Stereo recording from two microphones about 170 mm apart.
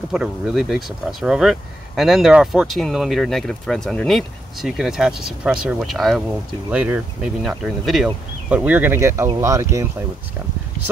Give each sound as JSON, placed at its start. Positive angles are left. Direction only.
{"t": 0.1, "sound": "speech", "side_deg": -5}